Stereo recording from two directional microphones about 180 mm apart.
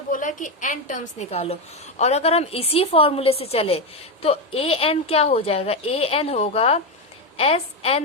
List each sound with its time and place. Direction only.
0.1 s a woman's voice: 45° left (ahead or behind)